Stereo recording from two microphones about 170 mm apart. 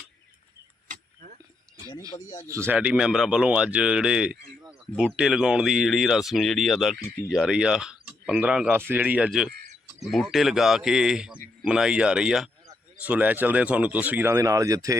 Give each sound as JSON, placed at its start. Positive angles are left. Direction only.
{"t": 1.9, "sound": "speech", "side_deg": 25}
{"t": 2.5, "sound": "speech", "side_deg": -15}